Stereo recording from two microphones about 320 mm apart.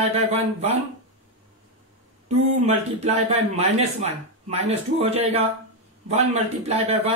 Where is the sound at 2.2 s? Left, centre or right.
Right.